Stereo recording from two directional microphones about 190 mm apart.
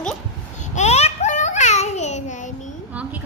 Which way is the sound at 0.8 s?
35° left (ahead or behind).